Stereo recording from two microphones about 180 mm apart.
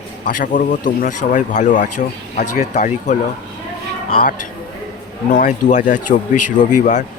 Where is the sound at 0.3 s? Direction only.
50° left (ahead or behind).